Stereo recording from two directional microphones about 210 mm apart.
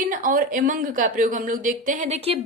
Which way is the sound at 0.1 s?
40° right (ahead or behind).